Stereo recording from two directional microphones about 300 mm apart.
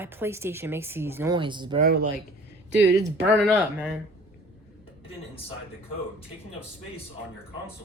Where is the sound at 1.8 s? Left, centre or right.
Right.